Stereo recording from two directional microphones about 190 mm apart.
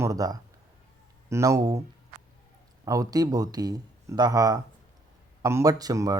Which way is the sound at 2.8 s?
20° right (ahead or behind).